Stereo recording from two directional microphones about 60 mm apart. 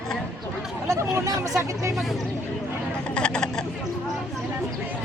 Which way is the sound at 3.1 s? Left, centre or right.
Centre.